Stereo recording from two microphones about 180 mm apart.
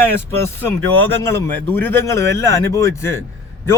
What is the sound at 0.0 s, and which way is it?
Speech, 15° left (ahead or behind).